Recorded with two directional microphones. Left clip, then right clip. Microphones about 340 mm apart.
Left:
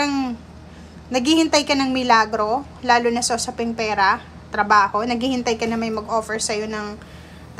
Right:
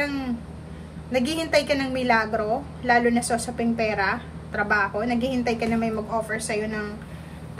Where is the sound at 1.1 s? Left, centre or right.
Centre.